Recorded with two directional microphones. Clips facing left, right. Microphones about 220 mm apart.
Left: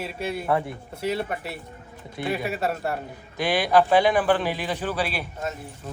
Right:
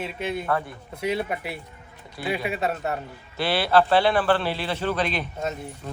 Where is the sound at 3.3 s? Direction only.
15° left (ahead or behind).